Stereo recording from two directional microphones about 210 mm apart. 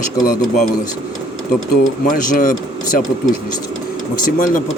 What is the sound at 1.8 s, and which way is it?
Speech, 40° left (ahead or behind).